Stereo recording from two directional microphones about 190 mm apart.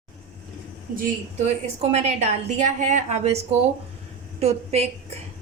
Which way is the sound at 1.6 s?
35° right (ahead or behind).